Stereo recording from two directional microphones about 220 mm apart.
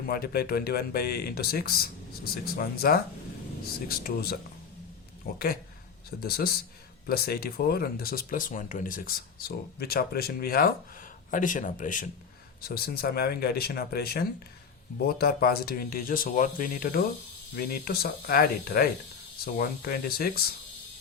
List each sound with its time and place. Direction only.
0.1 s speech: 45° left (ahead or behind)